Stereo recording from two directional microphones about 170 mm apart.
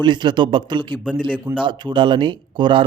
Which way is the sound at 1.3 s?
5° right (ahead or behind).